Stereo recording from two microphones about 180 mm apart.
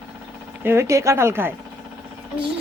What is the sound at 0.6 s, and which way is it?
Speech, 15° right (ahead or behind).